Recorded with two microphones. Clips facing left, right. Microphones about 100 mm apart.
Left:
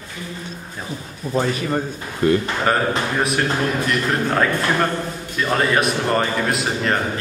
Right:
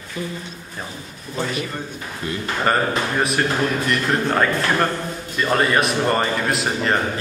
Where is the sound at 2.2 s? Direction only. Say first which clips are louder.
Left 12 dB; 50° left (ahead or behind).